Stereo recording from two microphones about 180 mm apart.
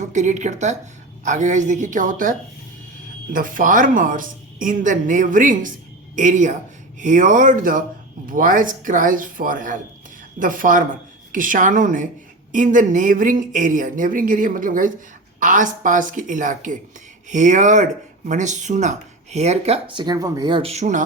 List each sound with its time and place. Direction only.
0.0 s speech: 40° right (ahead or behind)
3.3 s speech: 50° right (ahead or behind)